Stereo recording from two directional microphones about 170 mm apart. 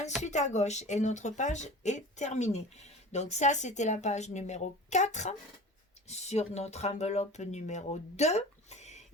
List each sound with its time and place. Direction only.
0.2 s speech: 45° left (ahead or behind)